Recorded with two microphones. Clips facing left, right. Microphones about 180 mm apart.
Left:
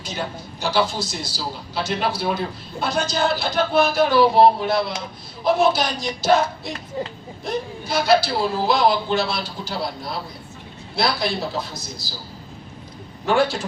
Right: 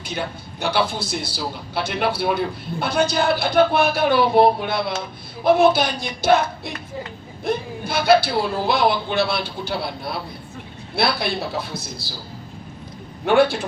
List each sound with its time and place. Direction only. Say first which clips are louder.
0.0 s speech: right 1 dB; 60° right (ahead or behind)
13.2 s speech: right 3 dB; 60° right (ahead or behind)